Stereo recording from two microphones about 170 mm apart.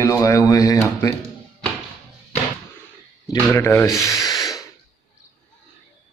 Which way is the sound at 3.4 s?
15° left (ahead or behind).